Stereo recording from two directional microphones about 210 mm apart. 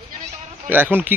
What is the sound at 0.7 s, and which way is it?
Speech, 10° right (ahead or behind).